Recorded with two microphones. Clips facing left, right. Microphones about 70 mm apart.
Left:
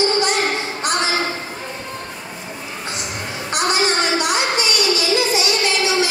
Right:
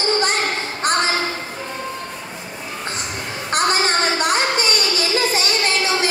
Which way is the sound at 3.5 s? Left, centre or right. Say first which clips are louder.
Right 1 dB; right.